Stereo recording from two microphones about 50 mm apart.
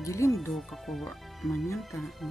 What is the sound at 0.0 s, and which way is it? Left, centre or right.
Speech, left.